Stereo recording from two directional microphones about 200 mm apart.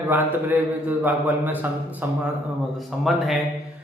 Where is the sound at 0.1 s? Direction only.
10° right (ahead or behind).